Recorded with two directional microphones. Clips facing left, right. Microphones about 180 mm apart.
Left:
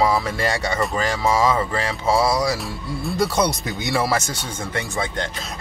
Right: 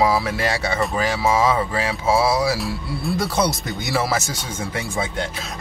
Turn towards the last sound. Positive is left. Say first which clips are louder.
# right 1 dB
turn(degrees=-5)  # may be behind; listen again after turning